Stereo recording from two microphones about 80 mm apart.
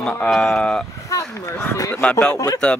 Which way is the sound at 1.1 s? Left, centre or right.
Left.